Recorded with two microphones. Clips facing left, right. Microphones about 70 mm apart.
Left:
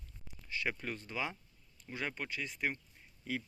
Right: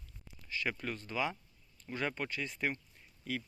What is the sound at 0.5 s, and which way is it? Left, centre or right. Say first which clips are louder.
Speech: right 1 dB; centre.